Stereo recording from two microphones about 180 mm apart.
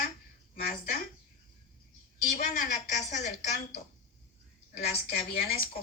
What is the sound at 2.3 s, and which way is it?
A woman's voice, 50° left (ahead or behind).